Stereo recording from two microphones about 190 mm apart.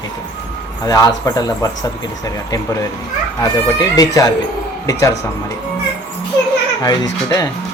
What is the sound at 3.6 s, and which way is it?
Speech, 20° left (ahead or behind).